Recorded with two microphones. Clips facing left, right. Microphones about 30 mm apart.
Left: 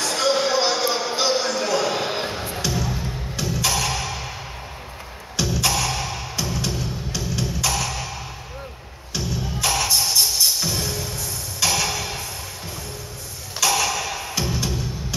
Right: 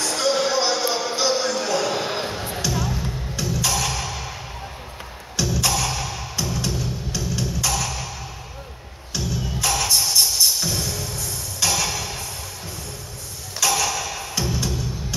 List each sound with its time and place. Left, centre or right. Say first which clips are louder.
0.0 s a sound: left 1 dB; centre
2.8 s music: right 1 dB; centre
3.3 s music: left 1 dB; centre
5.3 s music: even; centre
9.1 s music: even; centre
13.6 s a sound: left 1 dB; centre
14.1 s music: even; centre